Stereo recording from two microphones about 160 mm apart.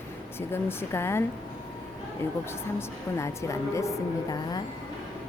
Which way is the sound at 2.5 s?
15° left (ahead or behind).